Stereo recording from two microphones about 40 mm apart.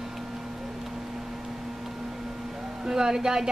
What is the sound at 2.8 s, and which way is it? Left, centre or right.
Speech, centre.